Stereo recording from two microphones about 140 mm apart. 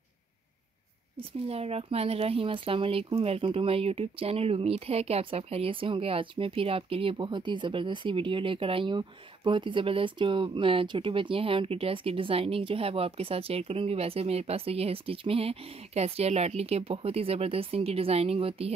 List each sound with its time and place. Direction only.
1.5 s speech: 45° right (ahead or behind)